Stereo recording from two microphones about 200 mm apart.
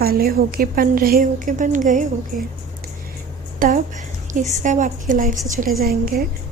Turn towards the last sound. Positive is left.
turn(degrees=-45)  # may be behind; listen again after turning